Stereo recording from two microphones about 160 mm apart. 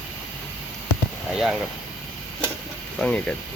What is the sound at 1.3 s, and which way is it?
Speech, 5° right (ahead or behind).